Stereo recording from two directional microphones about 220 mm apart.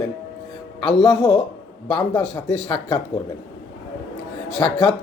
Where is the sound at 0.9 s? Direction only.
Centre (ahead or behind).